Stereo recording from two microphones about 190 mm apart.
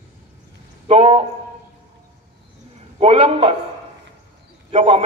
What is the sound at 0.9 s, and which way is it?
Speech, 30° right (ahead or behind).